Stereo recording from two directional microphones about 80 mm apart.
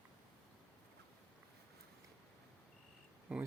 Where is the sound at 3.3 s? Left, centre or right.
Centre.